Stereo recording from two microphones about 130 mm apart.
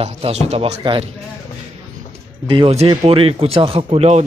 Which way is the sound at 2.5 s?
40° right (ahead or behind).